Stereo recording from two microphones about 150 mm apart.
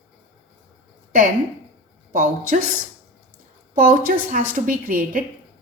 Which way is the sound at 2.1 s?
60° right (ahead or behind).